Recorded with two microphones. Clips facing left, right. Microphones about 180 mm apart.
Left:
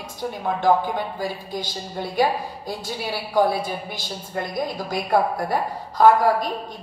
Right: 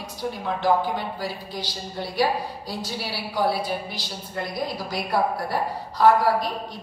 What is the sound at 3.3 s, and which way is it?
A woman's voice, 50° left (ahead or behind).